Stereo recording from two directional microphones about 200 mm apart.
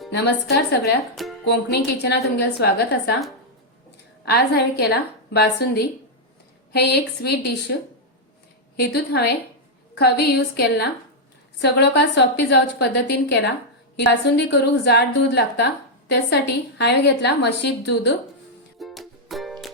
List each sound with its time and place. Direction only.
0.1 s a woman's voice: 55° left (ahead or behind)
4.3 s a woman's voice: 55° left (ahead or behind)
8.7 s a woman's voice: 55° left (ahead or behind)
18.8 s music: centre (ahead or behind)